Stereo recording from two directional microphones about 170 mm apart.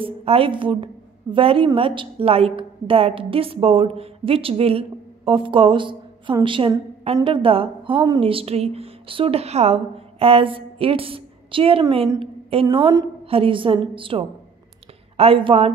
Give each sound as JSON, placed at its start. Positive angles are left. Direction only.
{"t": 0.0, "sound": "a woman's voice", "side_deg": -35}
{"t": 12.2, "sound": "a sound", "side_deg": -35}
{"t": 12.6, "sound": "a woman's voice", "side_deg": -25}